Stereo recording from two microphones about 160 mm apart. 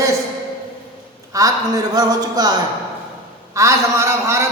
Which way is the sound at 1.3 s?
20° right (ahead or behind).